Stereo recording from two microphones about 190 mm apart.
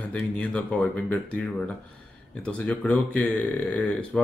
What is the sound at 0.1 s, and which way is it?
Speech, 5° left (ahead or behind).